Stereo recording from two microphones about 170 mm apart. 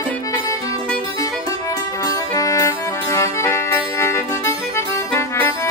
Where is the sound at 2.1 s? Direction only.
20° left (ahead or behind).